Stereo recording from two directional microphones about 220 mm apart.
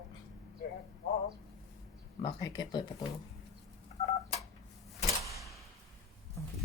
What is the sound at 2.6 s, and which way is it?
Speech, 20° left (ahead or behind).